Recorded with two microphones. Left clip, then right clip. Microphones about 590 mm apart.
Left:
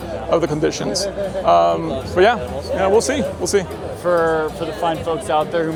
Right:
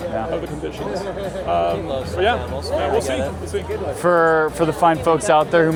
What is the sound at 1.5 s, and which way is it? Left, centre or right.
Speech, left.